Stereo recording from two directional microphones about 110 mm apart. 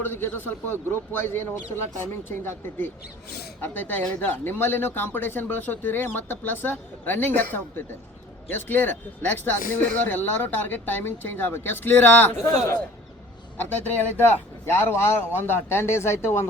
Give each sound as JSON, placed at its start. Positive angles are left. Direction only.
{"t": 0.0, "sound": "speech", "side_deg": 20}
{"t": 13.6, "sound": "speech", "side_deg": 15}